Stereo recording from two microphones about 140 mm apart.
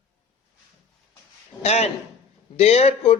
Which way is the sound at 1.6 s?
50° left (ahead or behind).